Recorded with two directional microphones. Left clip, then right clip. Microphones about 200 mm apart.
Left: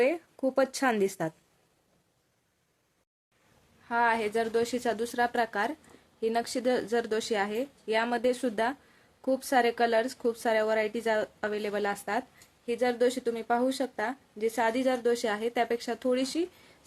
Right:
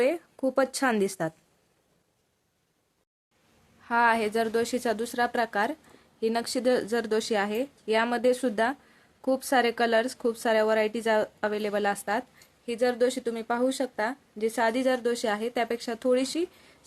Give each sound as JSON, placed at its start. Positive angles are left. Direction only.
{"t": 0.0, "sound": "speech", "side_deg": -15}
{"t": 3.8, "sound": "speech", "side_deg": -30}